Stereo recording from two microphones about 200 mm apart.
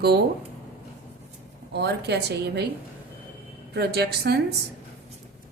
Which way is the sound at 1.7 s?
55° right (ahead or behind).